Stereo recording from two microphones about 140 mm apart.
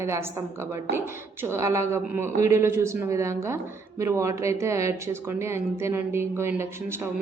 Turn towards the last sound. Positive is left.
turn(degrees=-20)  # may be behind; listen again after turning